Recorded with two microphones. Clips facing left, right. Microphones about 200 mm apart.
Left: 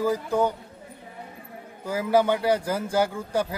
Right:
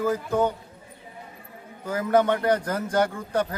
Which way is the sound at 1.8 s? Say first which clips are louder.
Even; 10° left (ahead or behind).